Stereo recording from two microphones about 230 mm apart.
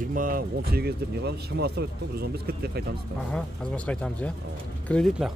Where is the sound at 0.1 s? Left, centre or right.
Right.